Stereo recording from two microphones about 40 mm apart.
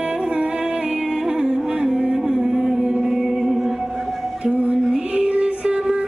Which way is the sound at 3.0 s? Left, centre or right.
Centre.